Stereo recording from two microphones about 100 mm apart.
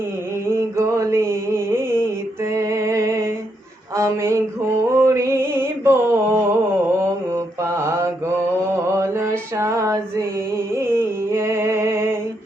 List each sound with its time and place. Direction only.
0.4 s a sound: 30° right (ahead or behind)
2.5 s music: 30° right (ahead or behind)
3.9 s speech: 30° right (ahead or behind)
4.9 s a sound: 30° right (ahead or behind)
8.7 s mantra: 25° right (ahead or behind)
10.8 s music: 25° right (ahead or behind)